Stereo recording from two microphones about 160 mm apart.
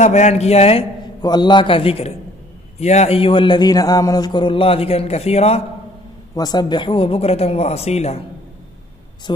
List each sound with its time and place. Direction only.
0.0 s speech: 45° left (ahead or behind)
1.2 s a man's voice: 25° left (ahead or behind)
6.3 s a man's voice: 25° left (ahead or behind); by 8.2 s 40° left (ahead or behind)